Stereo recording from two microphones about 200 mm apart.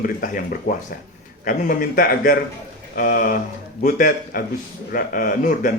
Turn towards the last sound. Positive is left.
turn(degrees=40)  # may be behind; listen again after turning